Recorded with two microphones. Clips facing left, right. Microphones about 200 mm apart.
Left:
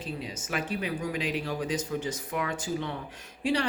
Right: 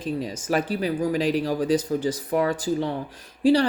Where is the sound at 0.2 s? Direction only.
40° right (ahead or behind).